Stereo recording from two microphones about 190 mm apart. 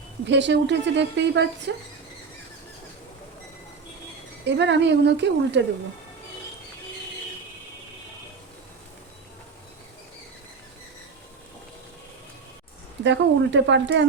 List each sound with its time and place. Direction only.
0.3 s a woman's voice: 65° right (ahead or behind)
4.4 s a woman's voice: 70° right (ahead or behind)
13.1 s a woman's voice: 70° right (ahead or behind)